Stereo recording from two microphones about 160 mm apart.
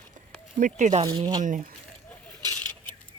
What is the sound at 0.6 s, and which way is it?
Speech, 50° right (ahead or behind).